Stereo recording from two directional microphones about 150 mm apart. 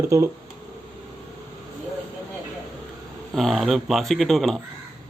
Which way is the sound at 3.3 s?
Centre (ahead or behind).